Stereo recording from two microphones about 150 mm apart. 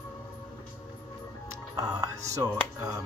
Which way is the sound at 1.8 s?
25° right (ahead or behind).